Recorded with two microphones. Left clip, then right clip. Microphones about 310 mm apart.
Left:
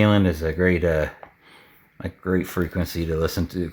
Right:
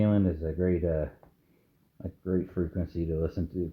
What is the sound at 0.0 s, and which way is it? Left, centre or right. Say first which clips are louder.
Speech: left 9 dB; left.